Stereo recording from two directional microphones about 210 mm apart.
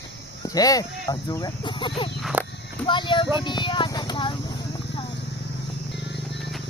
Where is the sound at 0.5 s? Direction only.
15° left (ahead or behind).